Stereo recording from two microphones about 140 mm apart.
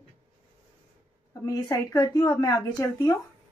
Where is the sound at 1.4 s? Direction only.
25° left (ahead or behind).